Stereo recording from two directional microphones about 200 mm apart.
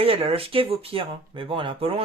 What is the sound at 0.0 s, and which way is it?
Speech, 30° right (ahead or behind).